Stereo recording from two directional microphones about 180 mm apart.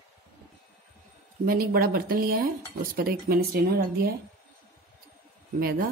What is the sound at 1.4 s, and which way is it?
Speech, 55° right (ahead or behind).